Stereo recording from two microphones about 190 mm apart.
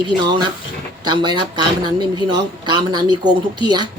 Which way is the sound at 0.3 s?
25° right (ahead or behind).